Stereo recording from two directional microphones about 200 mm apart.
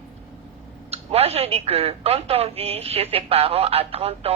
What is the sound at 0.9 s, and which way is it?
A woman's voice, 30° right (ahead or behind).